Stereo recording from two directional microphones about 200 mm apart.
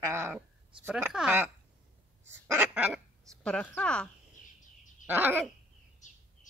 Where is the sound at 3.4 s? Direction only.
5° left (ahead or behind).